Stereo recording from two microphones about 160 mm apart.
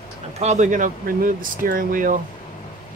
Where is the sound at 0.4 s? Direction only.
45° right (ahead or behind).